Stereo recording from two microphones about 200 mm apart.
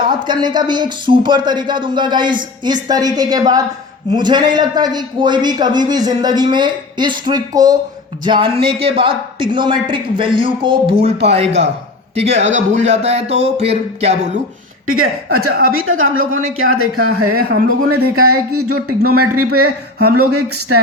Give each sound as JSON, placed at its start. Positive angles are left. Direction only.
{"t": 0.0, "sound": "a man's voice", "side_deg": -20}
{"t": 12.1, "sound": "speech", "side_deg": -30}
{"t": 14.8, "sound": "speech", "side_deg": -90}
{"t": 15.4, "sound": "a woman's voice", "side_deg": -50}
{"t": 15.9, "sound": "speech", "side_deg": -90}
{"t": 17.3, "sound": "a woman's voice", "side_deg": -50}
{"t": 18.5, "sound": "speech", "side_deg": -90}